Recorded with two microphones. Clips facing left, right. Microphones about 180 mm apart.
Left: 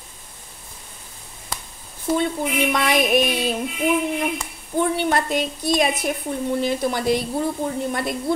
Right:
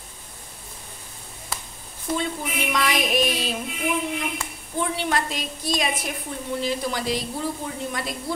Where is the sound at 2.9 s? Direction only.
55° left (ahead or behind).